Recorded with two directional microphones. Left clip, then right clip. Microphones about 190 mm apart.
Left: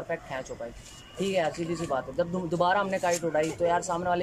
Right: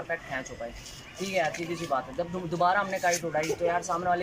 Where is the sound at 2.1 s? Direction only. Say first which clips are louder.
Left 2 dB; 25° left (ahead or behind).